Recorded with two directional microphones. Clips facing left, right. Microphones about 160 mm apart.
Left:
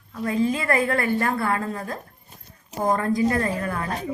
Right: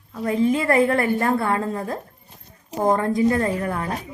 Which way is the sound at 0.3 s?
25° right (ahead or behind).